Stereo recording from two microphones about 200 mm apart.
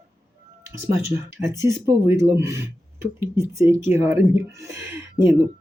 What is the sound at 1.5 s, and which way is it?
Speech, 15° right (ahead or behind).